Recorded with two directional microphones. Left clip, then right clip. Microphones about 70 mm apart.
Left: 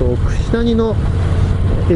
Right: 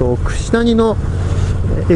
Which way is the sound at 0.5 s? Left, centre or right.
Right.